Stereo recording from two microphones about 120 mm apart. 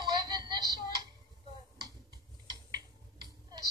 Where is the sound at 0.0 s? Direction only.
35° right (ahead or behind).